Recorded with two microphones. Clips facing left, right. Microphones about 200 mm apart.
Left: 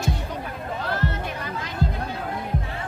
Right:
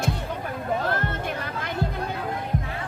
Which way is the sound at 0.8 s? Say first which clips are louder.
Even; 50° right (ahead or behind).